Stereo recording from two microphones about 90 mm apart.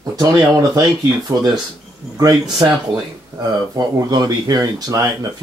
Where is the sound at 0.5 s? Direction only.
45° right (ahead or behind).